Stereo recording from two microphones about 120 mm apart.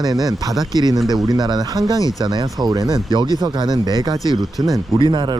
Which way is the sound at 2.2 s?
35° right (ahead or behind).